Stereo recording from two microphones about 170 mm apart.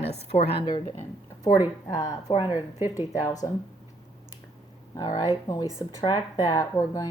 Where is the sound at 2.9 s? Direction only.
20° left (ahead or behind).